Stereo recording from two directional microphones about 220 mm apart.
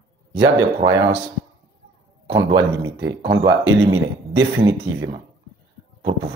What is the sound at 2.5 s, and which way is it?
Speech, 20° right (ahead or behind).